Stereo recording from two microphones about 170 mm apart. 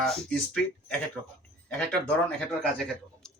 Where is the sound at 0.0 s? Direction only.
Centre (ahead or behind).